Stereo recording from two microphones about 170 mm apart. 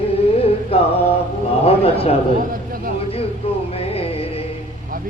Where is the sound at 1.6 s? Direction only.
35° left (ahead or behind).